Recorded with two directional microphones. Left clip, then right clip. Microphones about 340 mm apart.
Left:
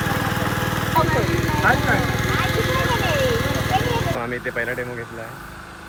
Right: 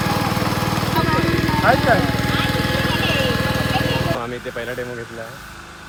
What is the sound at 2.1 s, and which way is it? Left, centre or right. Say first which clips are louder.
Vehicle: right 1 dB; right.